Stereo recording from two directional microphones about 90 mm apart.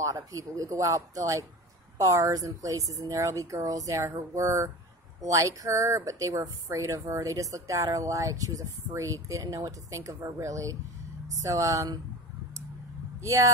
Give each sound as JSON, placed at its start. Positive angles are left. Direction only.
{"t": 0.0, "sound": "speech", "side_deg": -40}
{"t": 13.2, "sound": "speech", "side_deg": -35}